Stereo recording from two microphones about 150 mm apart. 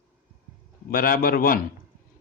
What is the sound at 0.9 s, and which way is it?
Speech, 70° left (ahead or behind).